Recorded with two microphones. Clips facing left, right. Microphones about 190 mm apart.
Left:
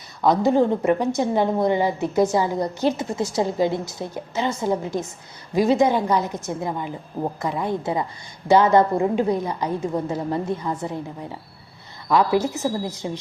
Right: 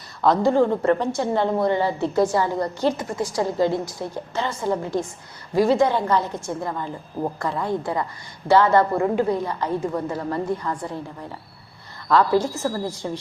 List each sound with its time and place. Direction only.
0.2 s a woman's voice: 15° left (ahead or behind)